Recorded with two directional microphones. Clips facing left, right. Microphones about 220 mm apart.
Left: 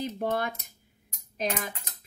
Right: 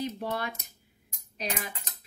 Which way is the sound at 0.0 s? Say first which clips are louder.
Left 3 dB; 50° left (ahead or behind).